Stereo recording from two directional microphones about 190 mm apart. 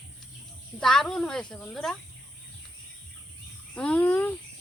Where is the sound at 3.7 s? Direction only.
5° left (ahead or behind).